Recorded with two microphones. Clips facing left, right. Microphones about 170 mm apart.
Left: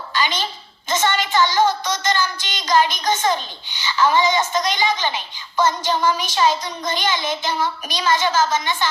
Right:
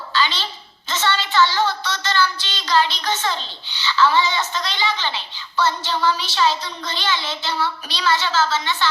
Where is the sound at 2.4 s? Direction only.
15° left (ahead or behind).